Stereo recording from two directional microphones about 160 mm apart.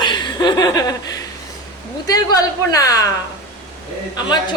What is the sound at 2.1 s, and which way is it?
Speech, 25° left (ahead or behind).